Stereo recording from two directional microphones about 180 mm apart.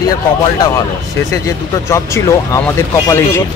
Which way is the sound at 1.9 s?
15° left (ahead or behind).